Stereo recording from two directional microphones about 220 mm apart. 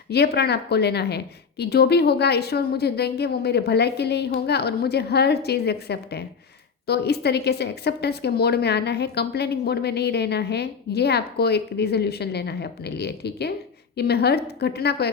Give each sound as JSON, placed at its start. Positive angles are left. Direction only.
{"t": 0.1, "sound": "a woman's voice", "side_deg": 45}